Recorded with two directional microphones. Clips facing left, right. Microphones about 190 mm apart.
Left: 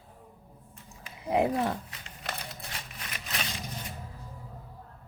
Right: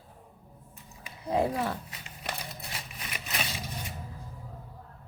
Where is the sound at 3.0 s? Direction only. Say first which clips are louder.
Right 2 dB; 5° right (ahead or behind).